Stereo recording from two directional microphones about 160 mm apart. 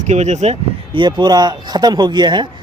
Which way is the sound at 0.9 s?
30° right (ahead or behind).